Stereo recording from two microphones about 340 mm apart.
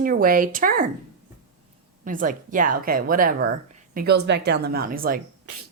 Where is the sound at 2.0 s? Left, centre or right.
Right.